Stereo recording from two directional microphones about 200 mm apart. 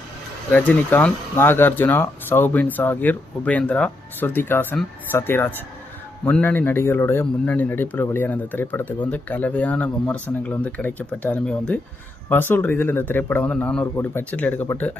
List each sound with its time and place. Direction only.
0.5 s speech: 10° left (ahead or behind)